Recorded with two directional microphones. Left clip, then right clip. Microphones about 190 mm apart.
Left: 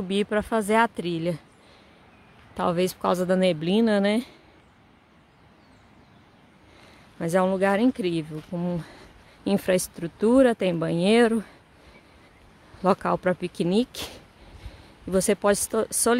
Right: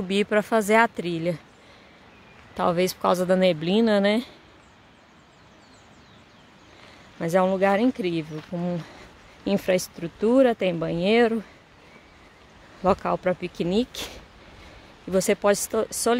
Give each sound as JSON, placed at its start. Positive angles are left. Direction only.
{"t": 0.1, "sound": "a woman's voice", "side_deg": 10}
{"t": 2.5, "sound": "a woman's voice", "side_deg": 10}
{"t": 7.2, "sound": "a woman's voice", "side_deg": 15}
{"t": 12.8, "sound": "speech", "side_deg": 20}